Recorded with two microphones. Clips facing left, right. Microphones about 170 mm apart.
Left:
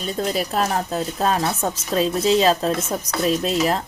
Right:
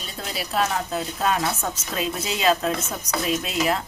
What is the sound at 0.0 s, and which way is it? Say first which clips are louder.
Speech: left 9 dB; 45° left (ahead or behind).